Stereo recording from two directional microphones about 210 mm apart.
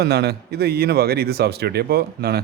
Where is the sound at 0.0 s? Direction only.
50° right (ahead or behind).